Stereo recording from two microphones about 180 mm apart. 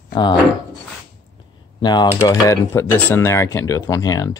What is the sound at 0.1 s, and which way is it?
Speech, 25° left (ahead or behind).